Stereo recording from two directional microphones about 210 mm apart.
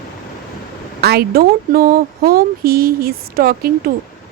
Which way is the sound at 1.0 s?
50° right (ahead or behind).